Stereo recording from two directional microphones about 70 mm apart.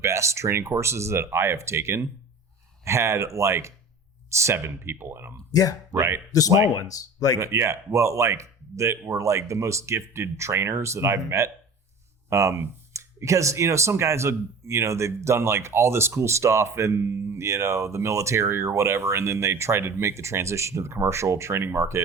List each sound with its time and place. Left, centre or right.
0.0 s speech: right
6.7 s speech: left
7.3 s speech: right